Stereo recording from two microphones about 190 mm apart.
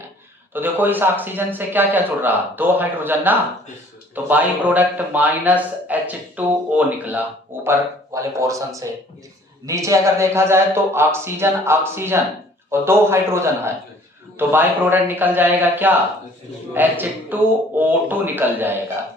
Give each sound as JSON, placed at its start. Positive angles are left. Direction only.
{"t": 0.5, "sound": "speech", "side_deg": -10}